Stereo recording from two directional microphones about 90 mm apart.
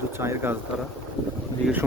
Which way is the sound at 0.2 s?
30° right (ahead or behind).